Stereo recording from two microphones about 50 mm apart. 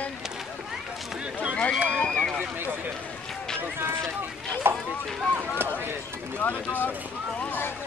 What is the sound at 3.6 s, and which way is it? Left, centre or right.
Run, right.